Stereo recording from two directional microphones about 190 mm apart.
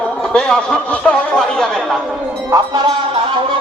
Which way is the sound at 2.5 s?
20° right (ahead or behind).